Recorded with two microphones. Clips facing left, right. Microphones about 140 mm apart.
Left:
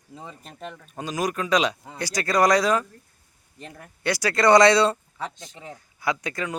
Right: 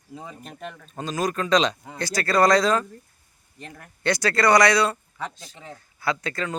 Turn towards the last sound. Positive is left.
turn(degrees=15)  # may be behind; listen again after turning